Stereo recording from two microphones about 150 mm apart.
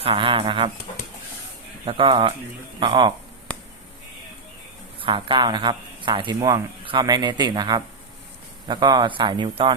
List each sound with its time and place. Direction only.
0.0 s a man's voice: 35° right (ahead or behind)
1.8 s a man's voice: 35° right (ahead or behind)
3.5 s a sound: 10° left (ahead or behind)
4.9 s a man's voice: 35° right (ahead or behind)